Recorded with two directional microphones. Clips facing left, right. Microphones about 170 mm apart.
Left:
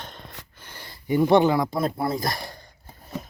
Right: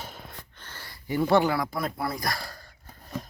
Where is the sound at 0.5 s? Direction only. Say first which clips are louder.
Left 2 dB; 15° left (ahead or behind).